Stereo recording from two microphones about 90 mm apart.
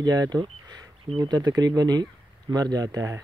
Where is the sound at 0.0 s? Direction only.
45° right (ahead or behind).